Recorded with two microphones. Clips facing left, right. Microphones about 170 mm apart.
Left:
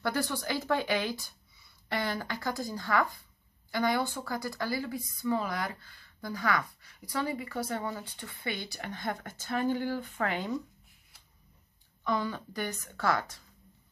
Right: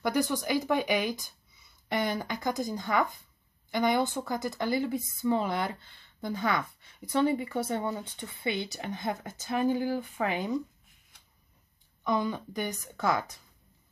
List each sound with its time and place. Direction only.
0.0 s speech: 15° right (ahead or behind)
12.0 s speech: 15° right (ahead or behind)